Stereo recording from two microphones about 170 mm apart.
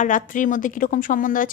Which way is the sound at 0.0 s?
50° left (ahead or behind).